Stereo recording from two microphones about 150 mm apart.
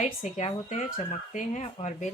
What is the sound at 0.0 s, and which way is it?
Speech, 50° left (ahead or behind).